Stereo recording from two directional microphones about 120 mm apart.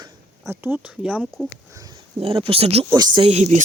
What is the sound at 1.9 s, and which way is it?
Speech, 50° right (ahead or behind).